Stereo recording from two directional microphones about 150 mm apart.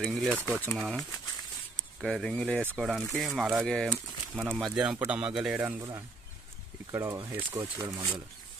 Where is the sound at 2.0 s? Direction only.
5° left (ahead or behind).